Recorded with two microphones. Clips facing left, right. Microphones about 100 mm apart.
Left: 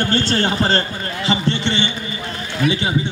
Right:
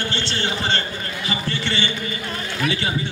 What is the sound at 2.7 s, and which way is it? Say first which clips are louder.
Speech: left 5 dB; 20° left (ahead or behind).